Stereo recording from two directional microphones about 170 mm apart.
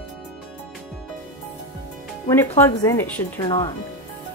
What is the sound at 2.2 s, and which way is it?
Speech, 15° left (ahead or behind).